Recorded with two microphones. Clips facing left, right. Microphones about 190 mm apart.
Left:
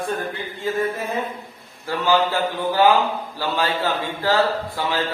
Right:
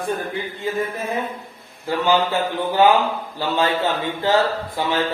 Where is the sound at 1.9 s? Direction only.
20° right (ahead or behind).